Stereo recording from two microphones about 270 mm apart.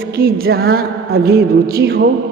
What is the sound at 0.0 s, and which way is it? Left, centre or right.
A man's voice, right.